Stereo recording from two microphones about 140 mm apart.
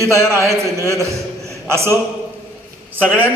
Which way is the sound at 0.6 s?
20° right (ahead or behind).